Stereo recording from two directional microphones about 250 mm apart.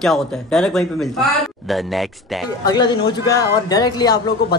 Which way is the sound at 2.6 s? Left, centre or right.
Centre.